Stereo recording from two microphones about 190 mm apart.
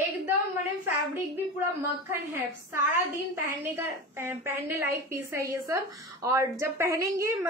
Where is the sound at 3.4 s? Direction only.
15° right (ahead or behind).